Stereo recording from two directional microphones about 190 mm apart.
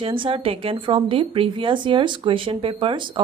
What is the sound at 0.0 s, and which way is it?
Speech, 30° right (ahead or behind).